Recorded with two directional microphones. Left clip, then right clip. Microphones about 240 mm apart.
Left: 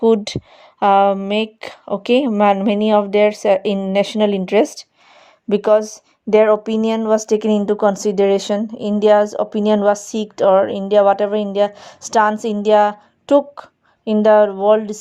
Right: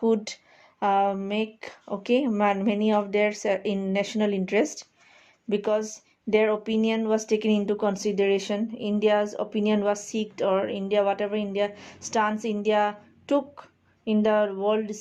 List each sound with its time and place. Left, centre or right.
0.0 s speech: left